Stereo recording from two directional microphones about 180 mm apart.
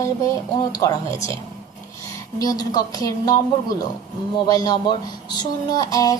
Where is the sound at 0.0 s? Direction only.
20° left (ahead or behind).